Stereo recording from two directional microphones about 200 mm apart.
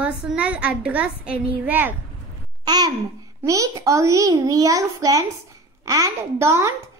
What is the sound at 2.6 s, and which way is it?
Babbling, 20° right (ahead or behind).